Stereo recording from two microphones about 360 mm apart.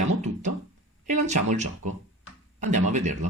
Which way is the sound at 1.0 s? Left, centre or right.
Centre.